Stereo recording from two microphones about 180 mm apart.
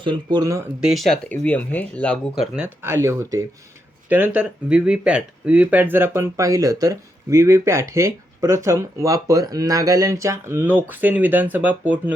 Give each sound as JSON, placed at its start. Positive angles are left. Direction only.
{"t": 0.0, "sound": "speech", "side_deg": -25}
{"t": 0.8, "sound": "speech", "side_deg": 0}
{"t": 2.6, "sound": "speech", "side_deg": -15}